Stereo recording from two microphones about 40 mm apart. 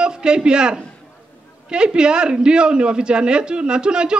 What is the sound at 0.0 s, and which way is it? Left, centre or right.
A man's voice, right.